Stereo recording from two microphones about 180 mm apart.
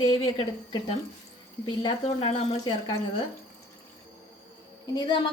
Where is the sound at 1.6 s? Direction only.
25° left (ahead or behind).